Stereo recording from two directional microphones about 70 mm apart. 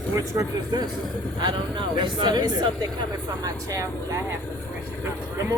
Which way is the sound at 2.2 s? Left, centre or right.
Right.